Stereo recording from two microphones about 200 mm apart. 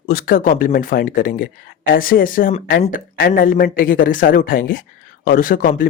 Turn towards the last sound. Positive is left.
turn(degrees=45)  # may be behind; listen again after turning